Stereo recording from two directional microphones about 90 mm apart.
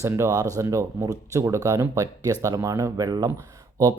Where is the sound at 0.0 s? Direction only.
35° right (ahead or behind).